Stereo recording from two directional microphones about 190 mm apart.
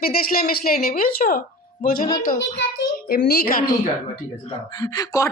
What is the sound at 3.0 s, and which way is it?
Speech, 55° left (ahead or behind).